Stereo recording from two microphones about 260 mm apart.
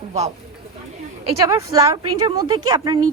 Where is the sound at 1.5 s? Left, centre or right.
Centre.